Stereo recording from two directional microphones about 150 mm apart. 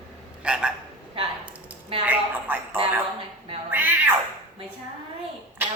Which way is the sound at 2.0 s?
10° right (ahead or behind).